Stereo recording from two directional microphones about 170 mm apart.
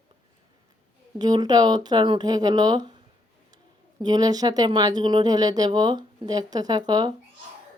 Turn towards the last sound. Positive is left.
turn(degrees=-25)  # may be behind; listen again after turning